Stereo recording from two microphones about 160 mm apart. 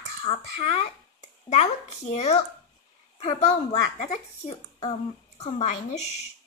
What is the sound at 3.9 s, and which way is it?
A child's voice, 45° left (ahead or behind).